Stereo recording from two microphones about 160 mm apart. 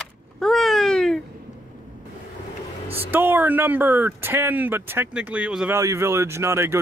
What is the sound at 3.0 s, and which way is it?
Speech, 15° right (ahead or behind).